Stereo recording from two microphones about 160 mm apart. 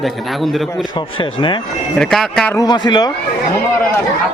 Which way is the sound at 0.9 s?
30° left (ahead or behind).